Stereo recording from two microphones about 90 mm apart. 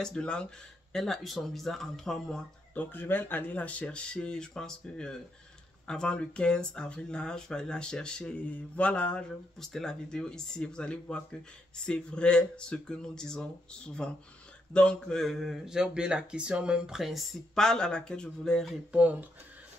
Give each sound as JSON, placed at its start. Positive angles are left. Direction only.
{"t": 0.0, "sound": "speech", "side_deg": 10}
{"t": 2.7, "sound": "speech", "side_deg": 20}
{"t": 18.9, "sound": "speech", "side_deg": -15}